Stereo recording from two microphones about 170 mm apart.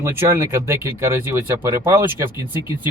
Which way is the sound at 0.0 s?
15° right (ahead or behind).